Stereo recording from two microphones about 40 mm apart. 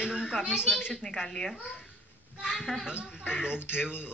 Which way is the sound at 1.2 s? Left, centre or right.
Centre.